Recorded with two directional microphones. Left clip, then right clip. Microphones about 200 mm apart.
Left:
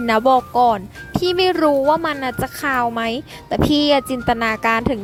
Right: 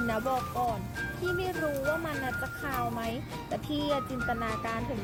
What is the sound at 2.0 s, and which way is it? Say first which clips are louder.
Speech: left 11 dB; 55° left (ahead or behind).